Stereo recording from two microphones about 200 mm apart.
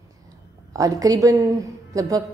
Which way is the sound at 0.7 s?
15° right (ahead or behind).